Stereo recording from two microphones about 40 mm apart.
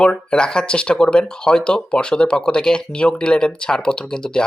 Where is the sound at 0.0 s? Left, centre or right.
Left.